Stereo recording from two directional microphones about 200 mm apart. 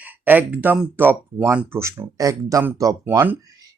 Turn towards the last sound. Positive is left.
turn(degrees=-15)  # may be behind; listen again after turning